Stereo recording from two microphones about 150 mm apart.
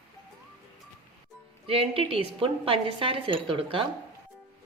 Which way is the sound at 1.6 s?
40° right (ahead or behind).